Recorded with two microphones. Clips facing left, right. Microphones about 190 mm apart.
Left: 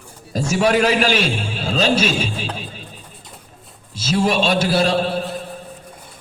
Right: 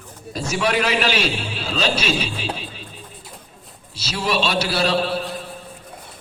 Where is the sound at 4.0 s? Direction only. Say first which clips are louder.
Left 5 dB; 50° left (ahead or behind).